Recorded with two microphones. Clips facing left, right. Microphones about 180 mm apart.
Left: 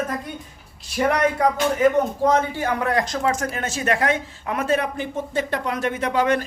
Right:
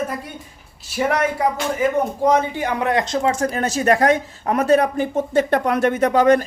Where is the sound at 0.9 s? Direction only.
5° right (ahead or behind).